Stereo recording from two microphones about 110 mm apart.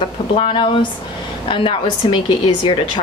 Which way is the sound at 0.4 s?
50° left (ahead or behind).